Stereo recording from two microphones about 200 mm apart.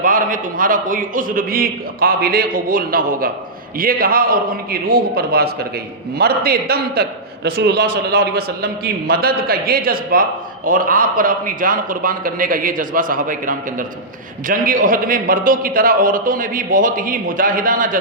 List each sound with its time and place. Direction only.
0.0 s a man's voice: 45° right (ahead or behind)